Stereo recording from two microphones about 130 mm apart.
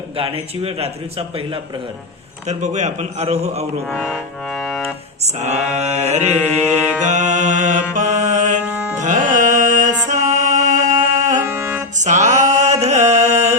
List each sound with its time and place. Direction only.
0.2 s speech: 50° right (ahead or behind)
2.5 s a man's voice: 65° right (ahead or behind)
3.9 s music: centre (ahead or behind)
5.4 s a man's voice: 60° right (ahead or behind)
6.7 s mantra: 10° right (ahead or behind)
7.0 s a man's voice: 65° right (ahead or behind)
7.9 s music: 70° right (ahead or behind)
8.6 s music: 10° right (ahead or behind)
9.0 s music: 70° right (ahead or behind)
11.4 s music: 15° right (ahead or behind)
11.9 s music: 65° right (ahead or behind)